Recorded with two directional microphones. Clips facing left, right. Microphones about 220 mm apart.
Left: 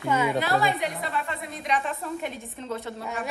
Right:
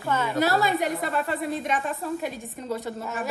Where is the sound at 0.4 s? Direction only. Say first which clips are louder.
Right 2 dB; 45° right (ahead or behind).